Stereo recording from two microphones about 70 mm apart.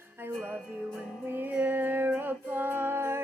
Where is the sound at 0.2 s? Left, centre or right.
Right.